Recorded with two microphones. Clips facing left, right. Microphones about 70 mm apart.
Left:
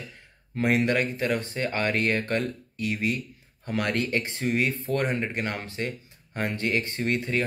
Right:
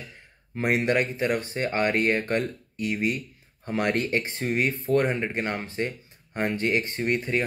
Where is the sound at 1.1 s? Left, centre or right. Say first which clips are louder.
Right 1 dB; right.